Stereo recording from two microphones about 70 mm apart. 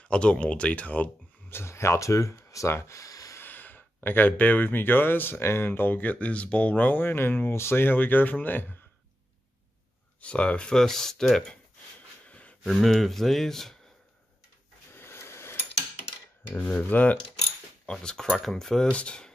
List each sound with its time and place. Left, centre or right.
0.0 s speech: centre
1.5 s speech: left
3.3 s speech: left
10.2 s speech: centre
12.3 s a sound: centre
12.6 s speech: centre
15.0 s a sound: left
16.7 s speech: left
17.9 s speech: centre